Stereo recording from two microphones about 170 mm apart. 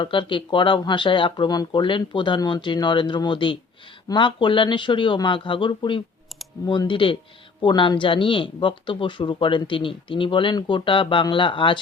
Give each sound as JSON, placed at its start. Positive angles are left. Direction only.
{"t": 0.0, "sound": "speech", "side_deg": 30}